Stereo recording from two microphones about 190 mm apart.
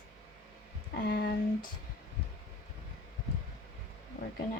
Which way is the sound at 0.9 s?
50° left (ahead or behind).